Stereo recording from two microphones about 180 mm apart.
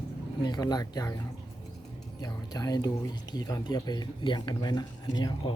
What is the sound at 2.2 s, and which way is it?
Speech, 20° left (ahead or behind).